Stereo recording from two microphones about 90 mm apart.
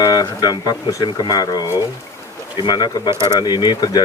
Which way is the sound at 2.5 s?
55° left (ahead or behind).